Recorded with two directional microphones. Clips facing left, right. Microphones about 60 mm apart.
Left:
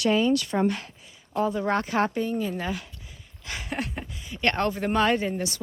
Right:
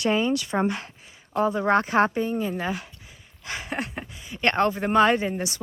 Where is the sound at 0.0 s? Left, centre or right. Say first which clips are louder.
Left 1 dB; right.